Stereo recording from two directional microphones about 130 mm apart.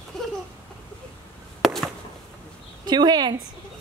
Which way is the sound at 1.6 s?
Centre (ahead or behind).